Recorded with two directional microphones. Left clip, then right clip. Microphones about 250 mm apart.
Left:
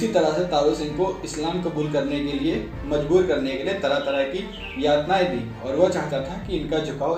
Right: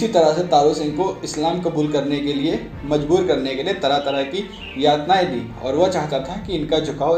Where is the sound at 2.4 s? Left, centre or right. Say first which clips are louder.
Right 3 dB; centre.